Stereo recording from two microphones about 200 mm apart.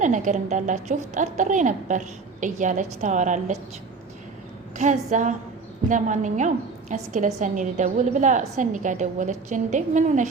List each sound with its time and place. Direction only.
0.0 s speech: 40° right (ahead or behind)
4.8 s speech: 40° right (ahead or behind)